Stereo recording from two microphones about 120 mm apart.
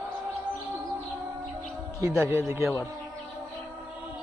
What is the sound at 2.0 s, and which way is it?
Speech, centre (ahead or behind).